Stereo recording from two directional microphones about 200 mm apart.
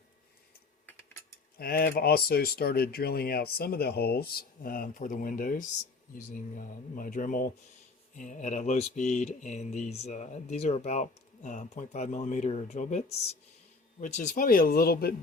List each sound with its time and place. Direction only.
1.5 s speech: 50° left (ahead or behind)
14.0 s speech: 35° left (ahead or behind)